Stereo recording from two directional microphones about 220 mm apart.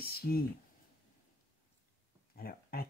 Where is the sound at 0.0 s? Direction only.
45° left (ahead or behind).